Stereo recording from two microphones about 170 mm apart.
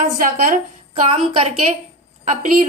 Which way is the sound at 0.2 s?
50° right (ahead or behind).